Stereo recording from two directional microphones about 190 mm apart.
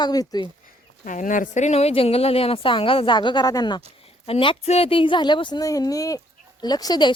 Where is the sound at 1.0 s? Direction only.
45° left (ahead or behind).